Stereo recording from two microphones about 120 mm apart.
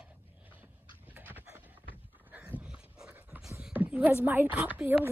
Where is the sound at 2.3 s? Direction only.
15° right (ahead or behind).